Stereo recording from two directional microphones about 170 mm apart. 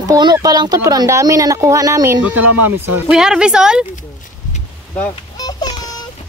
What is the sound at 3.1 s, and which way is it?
Speech, 5° right (ahead or behind).